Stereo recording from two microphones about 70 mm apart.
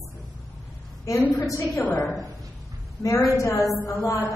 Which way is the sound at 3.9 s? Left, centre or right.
Left.